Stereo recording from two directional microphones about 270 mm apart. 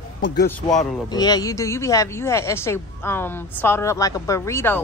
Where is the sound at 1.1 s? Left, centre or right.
Centre.